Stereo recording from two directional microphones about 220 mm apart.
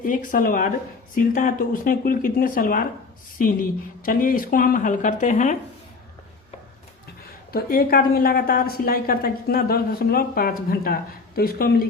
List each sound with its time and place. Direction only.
0.0 s a woman's voice: 35° left (ahead or behind)
7.5 s a woman's voice: 40° left (ahead or behind)